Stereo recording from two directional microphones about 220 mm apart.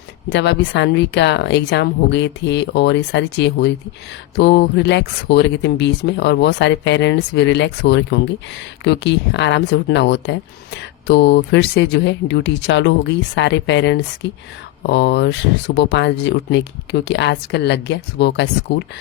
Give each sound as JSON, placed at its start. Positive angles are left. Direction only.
{"t": 0.3, "sound": "speech", "side_deg": 55}